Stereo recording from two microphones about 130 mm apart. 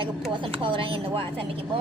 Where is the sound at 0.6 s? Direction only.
40° right (ahead or behind).